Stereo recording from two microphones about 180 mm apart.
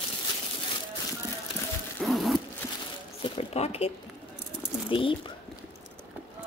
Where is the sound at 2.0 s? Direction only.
Centre (ahead or behind).